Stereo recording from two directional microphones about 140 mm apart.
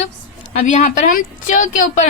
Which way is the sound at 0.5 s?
60° left (ahead or behind).